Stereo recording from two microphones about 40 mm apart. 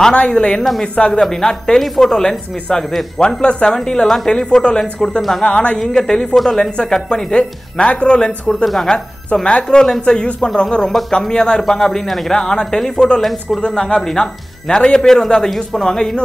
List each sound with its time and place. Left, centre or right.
0.1 s speech: left
0.6 s a woman's voice: centre
0.9 s speech: left
1.3 s speech: centre
13.2 s a woman's voice: centre
13.7 s speech: centre